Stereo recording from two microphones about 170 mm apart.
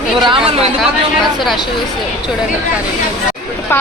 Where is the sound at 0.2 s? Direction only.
30° right (ahead or behind).